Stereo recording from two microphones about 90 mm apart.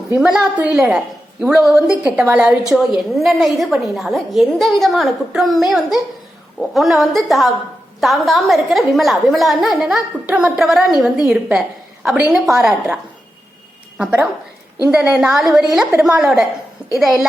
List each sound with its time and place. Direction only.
0.2 s a woman's voice: 10° right (ahead or behind)
2.2 s a woman's voice: 15° right (ahead or behind)
2.6 s a woman's voice: 5° right (ahead or behind)
14.0 s a woman's voice: 15° right (ahead or behind)